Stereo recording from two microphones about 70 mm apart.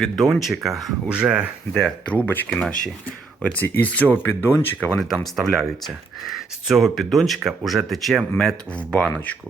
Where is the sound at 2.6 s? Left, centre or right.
Centre; by 4.5 s left.